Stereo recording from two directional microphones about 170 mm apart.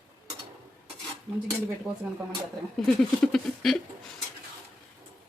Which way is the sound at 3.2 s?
5° left (ahead or behind).